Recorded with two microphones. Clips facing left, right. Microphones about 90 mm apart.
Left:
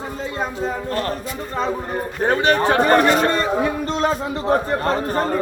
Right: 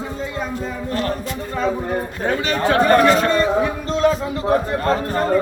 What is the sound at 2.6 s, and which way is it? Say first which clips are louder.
Speech: right 6 dB; 25° left (ahead or behind).